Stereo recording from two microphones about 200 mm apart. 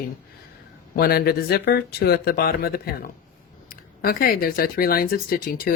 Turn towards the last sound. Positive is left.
turn(degrees=45)  # may be behind; listen again after turning